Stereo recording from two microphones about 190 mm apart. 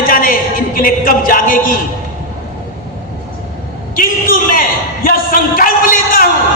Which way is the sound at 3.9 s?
45° left (ahead or behind).